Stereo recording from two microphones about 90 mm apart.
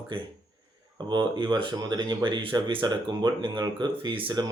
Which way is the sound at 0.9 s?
55° right (ahead or behind).